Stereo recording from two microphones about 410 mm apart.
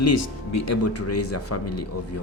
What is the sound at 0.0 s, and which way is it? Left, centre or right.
Speech, left.